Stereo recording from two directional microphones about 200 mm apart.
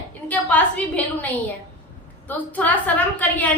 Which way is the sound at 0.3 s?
5° left (ahead or behind).